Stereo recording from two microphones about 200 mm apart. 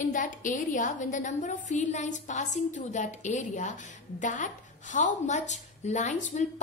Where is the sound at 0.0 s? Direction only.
40° left (ahead or behind).